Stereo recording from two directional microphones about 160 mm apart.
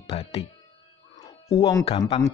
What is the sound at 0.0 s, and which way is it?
Speech, 40° left (ahead or behind).